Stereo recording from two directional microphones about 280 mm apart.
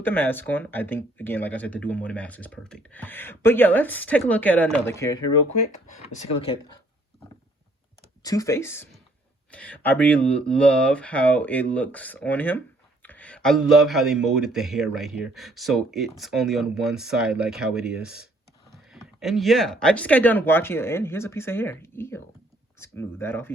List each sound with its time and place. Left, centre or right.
0.0 s speech: centre
6.1 s speech: left
8.2 s speech: centre